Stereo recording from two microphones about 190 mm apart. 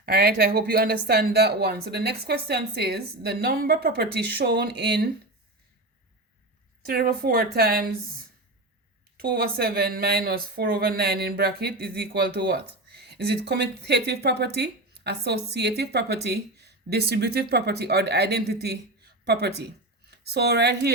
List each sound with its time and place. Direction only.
0.0 s speech: 55° right (ahead or behind)
6.8 s a woman's voice: 55° right (ahead or behind)